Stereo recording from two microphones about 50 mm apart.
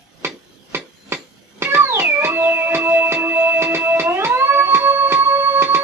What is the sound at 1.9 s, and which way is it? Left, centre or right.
Music, right.